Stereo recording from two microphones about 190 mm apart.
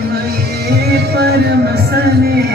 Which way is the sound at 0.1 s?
55° right (ahead or behind).